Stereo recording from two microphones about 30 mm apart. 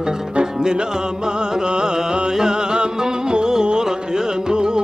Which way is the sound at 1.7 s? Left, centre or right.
Right.